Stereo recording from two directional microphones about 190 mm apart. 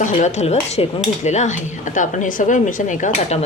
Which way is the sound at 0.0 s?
40° left (ahead or behind).